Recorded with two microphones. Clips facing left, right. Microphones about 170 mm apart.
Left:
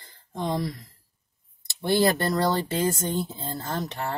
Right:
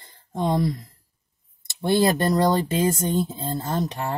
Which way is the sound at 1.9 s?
20° right (ahead or behind).